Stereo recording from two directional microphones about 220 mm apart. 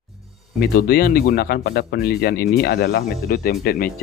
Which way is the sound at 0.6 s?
45° left (ahead or behind).